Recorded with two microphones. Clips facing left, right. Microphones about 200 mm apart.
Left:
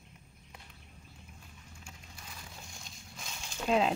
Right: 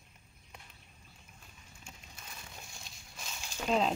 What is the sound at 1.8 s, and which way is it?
Crushing, 20° right (ahead or behind).